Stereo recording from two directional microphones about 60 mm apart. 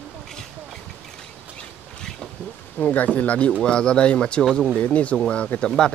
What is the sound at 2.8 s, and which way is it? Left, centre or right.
Speech, left.